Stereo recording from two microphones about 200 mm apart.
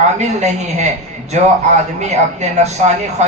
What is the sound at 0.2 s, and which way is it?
Speech, 35° right (ahead or behind).